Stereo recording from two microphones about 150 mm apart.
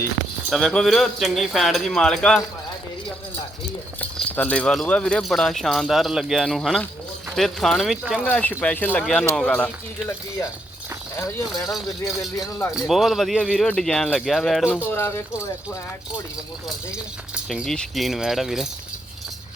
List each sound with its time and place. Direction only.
0.5 s speech: centre (ahead or behind)
4.0 s speech: 10° left (ahead or behind)
11.3 s speech: 25° left (ahead or behind)
12.7 s speech: centre (ahead or behind)
14.8 s speech: 15° left (ahead or behind)
17.3 s speech: 5° right (ahead or behind)